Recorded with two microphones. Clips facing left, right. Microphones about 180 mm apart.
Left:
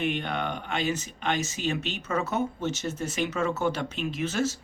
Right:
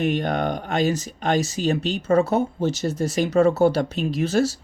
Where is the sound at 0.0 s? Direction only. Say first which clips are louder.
Right 7 dB; 40° right (ahead or behind).